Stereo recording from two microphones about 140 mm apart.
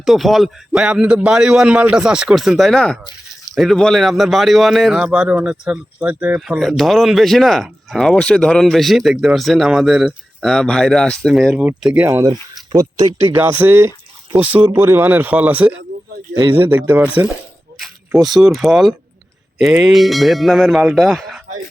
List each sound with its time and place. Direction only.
0.0 s a man's voice: centre (ahead or behind)
12.0 s speech: 25° right (ahead or behind)
16.3 s speech: 30° right (ahead or behind)
16.6 s speech: 15° right (ahead or behind)
17.7 s a man's voice: centre (ahead or behind)